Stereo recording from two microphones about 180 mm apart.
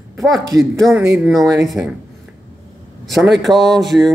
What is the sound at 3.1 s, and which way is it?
Speech, centre (ahead or behind).